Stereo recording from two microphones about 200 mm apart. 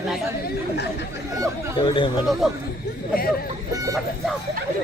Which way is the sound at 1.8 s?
25° left (ahead or behind).